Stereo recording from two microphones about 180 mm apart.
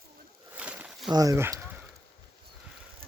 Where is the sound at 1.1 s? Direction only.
20° right (ahead or behind).